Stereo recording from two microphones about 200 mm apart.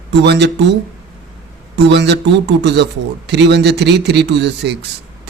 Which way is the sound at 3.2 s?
60° right (ahead or behind).